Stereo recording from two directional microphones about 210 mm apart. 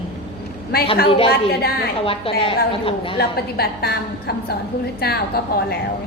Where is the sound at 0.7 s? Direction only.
45° left (ahead or behind).